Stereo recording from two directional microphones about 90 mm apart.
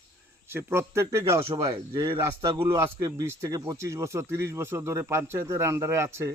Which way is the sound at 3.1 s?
35° right (ahead or behind).